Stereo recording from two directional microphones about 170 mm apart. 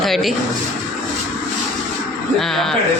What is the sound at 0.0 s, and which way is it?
Speech, centre (ahead or behind).